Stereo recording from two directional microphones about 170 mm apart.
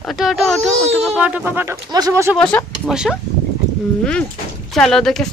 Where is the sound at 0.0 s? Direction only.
Centre (ahead or behind); by 2.3 s 20° right (ahead or behind).